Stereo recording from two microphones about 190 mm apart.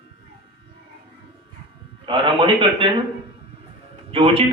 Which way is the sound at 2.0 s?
25° right (ahead or behind).